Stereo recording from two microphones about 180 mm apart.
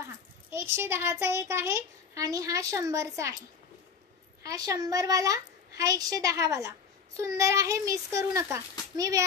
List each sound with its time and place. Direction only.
0.0 s a child's voice: 15° right (ahead or behind)